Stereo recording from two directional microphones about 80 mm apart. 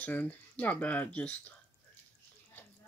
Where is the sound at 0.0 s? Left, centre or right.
Centre.